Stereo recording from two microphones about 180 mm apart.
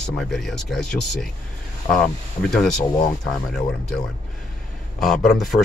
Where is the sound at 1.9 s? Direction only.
25° left (ahead or behind).